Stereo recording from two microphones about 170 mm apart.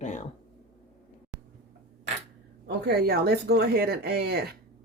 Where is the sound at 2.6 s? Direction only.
70° right (ahead or behind).